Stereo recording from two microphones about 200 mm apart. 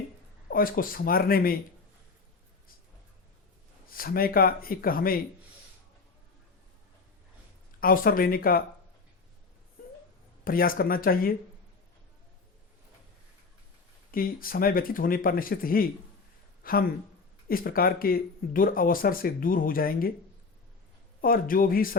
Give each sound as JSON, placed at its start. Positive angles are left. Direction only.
{"t": 0.4, "sound": "speech", "side_deg": 45}
{"t": 3.9, "sound": "speech", "side_deg": 45}
{"t": 7.8, "sound": "speech", "side_deg": 45}
{"t": 10.4, "sound": "speech", "side_deg": 45}
{"t": 14.1, "sound": "speech", "side_deg": 45}
{"t": 21.2, "sound": "speech", "side_deg": 45}